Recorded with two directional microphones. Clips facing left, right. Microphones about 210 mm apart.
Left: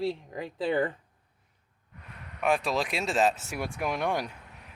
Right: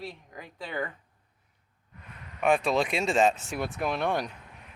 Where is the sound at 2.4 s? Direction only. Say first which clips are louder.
Right 3 dB; centre (ahead or behind).